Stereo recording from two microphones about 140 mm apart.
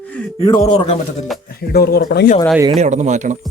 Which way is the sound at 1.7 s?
90° left.